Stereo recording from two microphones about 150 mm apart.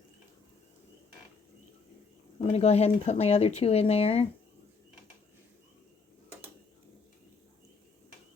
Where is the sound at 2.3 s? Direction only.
45° left (ahead or behind).